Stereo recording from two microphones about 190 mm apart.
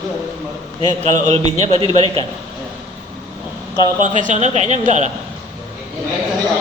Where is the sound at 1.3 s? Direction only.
35° right (ahead or behind).